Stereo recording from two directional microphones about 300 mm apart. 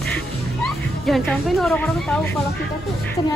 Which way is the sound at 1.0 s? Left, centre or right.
Centre.